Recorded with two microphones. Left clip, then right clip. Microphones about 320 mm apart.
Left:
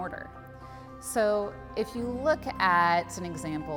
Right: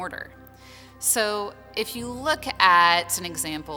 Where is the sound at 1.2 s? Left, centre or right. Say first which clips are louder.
Even; left.